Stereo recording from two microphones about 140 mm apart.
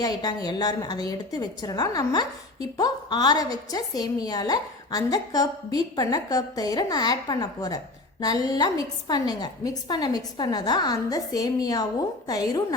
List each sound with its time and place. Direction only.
0.0 s a woman's voice: 30° left (ahead or behind)